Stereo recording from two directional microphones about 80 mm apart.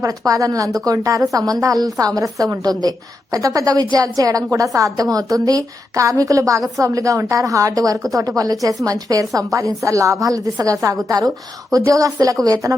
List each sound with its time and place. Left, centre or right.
0.0 s a woman's voice: right